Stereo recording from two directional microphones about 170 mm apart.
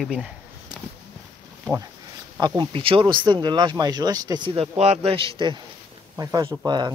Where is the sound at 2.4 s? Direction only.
25° right (ahead or behind).